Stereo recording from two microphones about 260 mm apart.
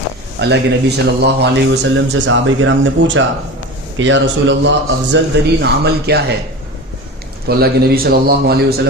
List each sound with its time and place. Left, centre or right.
0.3 s speech: right
7.4 s speech: right